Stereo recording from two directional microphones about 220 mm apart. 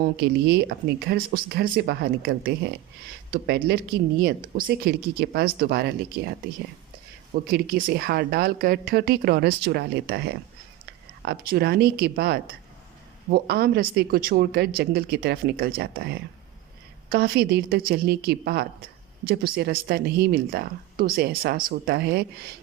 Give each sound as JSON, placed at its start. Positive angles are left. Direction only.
{"t": 0.0, "sound": "speech", "side_deg": -50}
{"t": 7.5, "sound": "speech", "side_deg": -45}